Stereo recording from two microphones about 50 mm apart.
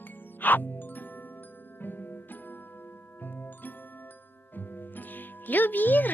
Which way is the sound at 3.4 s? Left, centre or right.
Left.